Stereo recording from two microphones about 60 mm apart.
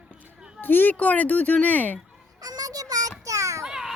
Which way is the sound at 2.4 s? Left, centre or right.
Right.